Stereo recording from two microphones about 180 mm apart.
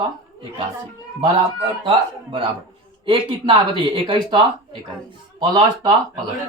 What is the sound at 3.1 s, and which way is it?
Speech, 30° right (ahead or behind).